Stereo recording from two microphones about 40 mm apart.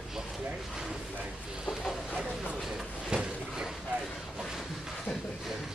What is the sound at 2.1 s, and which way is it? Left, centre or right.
Speech, centre.